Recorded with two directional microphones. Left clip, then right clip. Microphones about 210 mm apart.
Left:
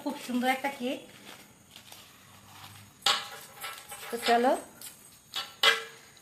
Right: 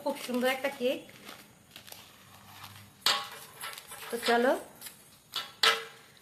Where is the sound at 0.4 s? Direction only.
40° right (ahead or behind).